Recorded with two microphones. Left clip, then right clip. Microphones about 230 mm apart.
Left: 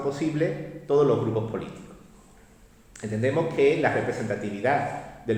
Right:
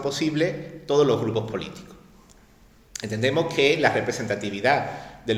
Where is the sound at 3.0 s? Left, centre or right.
Right.